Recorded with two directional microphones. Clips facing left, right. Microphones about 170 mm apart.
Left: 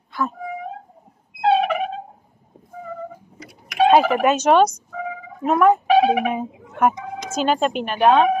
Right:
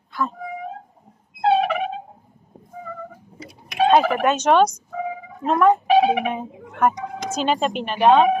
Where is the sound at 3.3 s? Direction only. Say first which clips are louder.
Right 2 dB; 25° right (ahead or behind).